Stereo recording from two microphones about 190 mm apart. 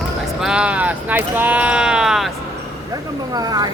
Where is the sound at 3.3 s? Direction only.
20° right (ahead or behind).